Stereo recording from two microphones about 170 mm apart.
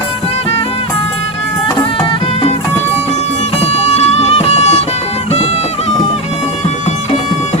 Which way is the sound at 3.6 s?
40° left (ahead or behind).